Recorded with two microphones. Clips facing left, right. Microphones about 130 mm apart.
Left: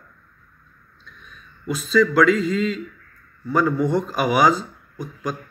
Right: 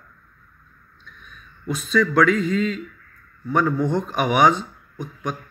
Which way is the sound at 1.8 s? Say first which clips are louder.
Left 2 dB; 5° left (ahead or behind).